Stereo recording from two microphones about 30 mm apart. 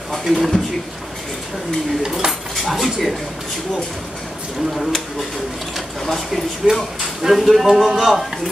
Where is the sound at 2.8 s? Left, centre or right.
Centre.